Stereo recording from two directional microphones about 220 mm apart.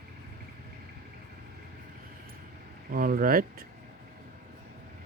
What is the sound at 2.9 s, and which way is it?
Speech, 40° right (ahead or behind).